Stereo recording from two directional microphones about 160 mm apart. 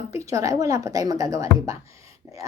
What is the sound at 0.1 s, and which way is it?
A woman's voice, 20° right (ahead or behind).